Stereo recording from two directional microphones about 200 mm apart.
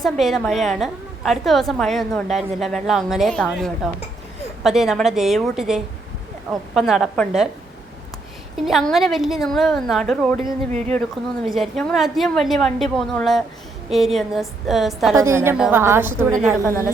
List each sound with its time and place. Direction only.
0.0 s a woman's voice: centre (ahead or behind)
8.5 s a woman's voice: centre (ahead or behind)
10.7 s speech: 35° right (ahead or behind)
11.4 s a woman's voice: centre (ahead or behind)
15.1 s a woman's voice: 15° right (ahead or behind)